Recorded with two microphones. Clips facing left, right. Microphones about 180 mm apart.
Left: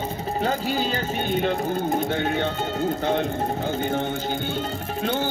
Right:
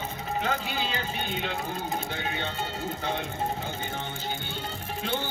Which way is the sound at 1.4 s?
50° left (ahead or behind).